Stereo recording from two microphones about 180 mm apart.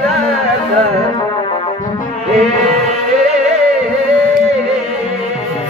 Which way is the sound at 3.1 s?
40° right (ahead or behind).